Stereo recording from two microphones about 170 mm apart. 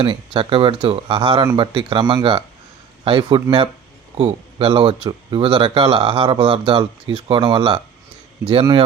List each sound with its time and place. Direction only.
0.0 s a man's voice: 30° right (ahead or behind)